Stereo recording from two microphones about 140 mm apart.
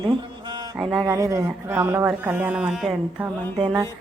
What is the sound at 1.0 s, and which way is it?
Speech, 25° right (ahead or behind).